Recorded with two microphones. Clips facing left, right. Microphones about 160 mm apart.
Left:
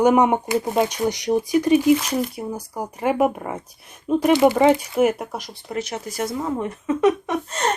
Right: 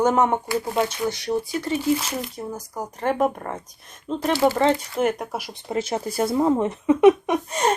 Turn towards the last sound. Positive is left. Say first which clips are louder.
# right 2 dB
turn(degrees=-10)  # may be behind; listen again after turning